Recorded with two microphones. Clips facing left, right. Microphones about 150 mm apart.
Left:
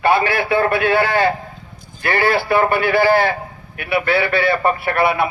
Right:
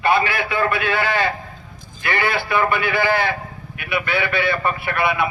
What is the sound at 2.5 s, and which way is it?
Speech, 50° left (ahead or behind).